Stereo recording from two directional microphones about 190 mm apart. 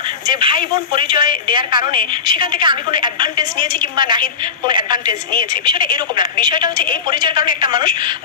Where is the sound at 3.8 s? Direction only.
25° right (ahead or behind).